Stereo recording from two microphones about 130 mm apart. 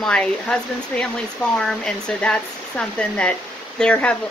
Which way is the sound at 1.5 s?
5° left (ahead or behind).